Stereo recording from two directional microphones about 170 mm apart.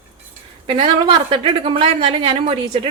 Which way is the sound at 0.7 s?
30° right (ahead or behind).